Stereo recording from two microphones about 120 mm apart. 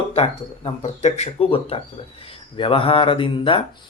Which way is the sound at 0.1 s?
55° left (ahead or behind).